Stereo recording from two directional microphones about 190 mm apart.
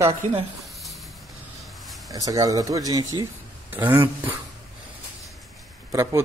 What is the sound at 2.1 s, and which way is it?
A man's voice, 20° right (ahead or behind).